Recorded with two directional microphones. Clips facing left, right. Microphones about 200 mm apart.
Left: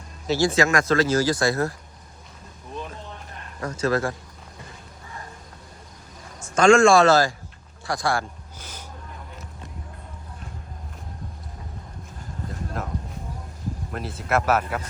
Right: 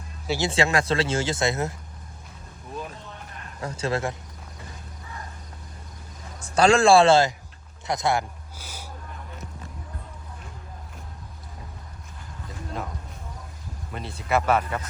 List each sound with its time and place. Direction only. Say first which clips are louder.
0.3 s speech: left 3 dB; 20° right (ahead or behind)
3.8 s speech: left 4 dB; 25° right (ahead or behind)
6.4 s a man's voice: left 3 dB; 35° right (ahead or behind)
8.5 s a sound: right 2 dB; 10° right (ahead or behind)
12.5 s a sound: left 1 dB; centre (ahead or behind)
13.9 s speech: even; centre (ahead or behind)